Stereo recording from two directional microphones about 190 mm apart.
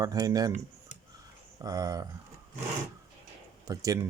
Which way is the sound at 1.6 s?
20° right (ahead or behind).